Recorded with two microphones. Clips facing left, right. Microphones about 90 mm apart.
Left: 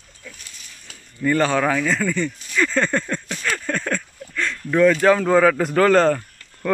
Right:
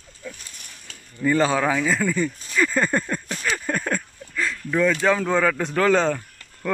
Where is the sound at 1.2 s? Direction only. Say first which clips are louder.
Left 1 dB; 15° right (ahead or behind).